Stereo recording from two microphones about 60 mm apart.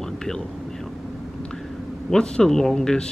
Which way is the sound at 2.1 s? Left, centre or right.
Centre.